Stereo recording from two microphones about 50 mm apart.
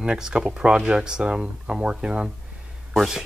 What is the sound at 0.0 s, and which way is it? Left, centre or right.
Speech, centre.